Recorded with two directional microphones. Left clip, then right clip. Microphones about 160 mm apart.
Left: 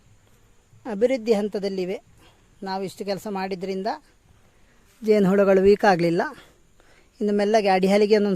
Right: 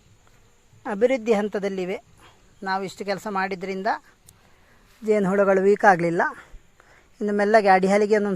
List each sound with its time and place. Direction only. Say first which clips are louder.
0.8 s speech: right 1 dB; 20° left (ahead or behind)
5.0 s speech: left 1 dB; 35° left (ahead or behind)